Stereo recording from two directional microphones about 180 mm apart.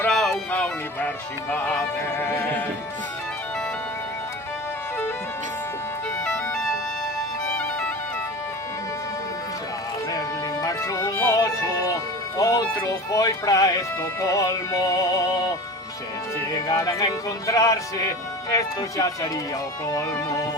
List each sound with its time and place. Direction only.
0.0 s music: 5° left (ahead or behind)
6.2 s music: 5° left (ahead or behind)
10.1 s music: 20° left (ahead or behind)
12.4 s speech: 20° left (ahead or behind)
16.6 s speech: 20° left (ahead or behind)